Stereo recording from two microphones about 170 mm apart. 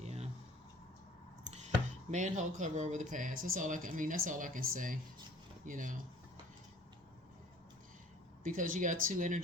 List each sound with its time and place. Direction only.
0.0 s a sound: 40° right (ahead or behind)
1.6 s speech: 45° right (ahead or behind)
8.4 s speech: 50° right (ahead or behind)